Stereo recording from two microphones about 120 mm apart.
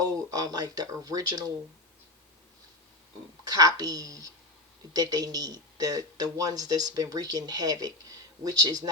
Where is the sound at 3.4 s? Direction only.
30° right (ahead or behind).